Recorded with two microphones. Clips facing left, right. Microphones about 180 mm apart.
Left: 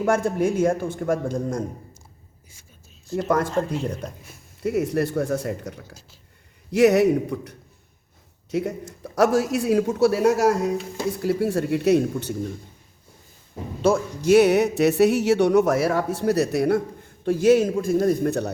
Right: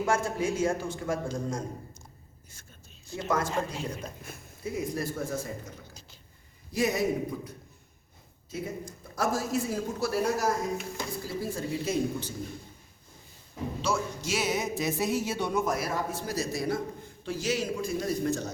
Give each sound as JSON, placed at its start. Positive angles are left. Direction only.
{"t": 0.0, "sound": "a man's voice", "side_deg": 60}
{"t": 3.2, "sound": "a man's voice", "side_deg": 55}
{"t": 4.6, "sound": "a man's voice", "side_deg": 70}
{"t": 13.8, "sound": "speech", "side_deg": 55}
{"t": 17.2, "sound": "a man's voice", "side_deg": 55}